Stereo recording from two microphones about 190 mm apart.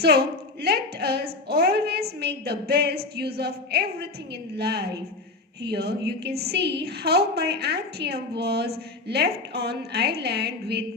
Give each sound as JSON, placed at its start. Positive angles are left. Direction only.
{"t": 0.0, "sound": "a woman's voice", "side_deg": -60}